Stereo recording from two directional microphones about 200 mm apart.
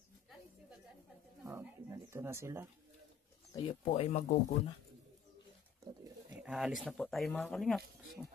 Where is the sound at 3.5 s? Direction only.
30° left (ahead or behind).